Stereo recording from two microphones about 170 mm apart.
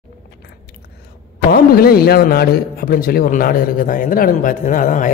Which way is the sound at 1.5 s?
60° left (ahead or behind).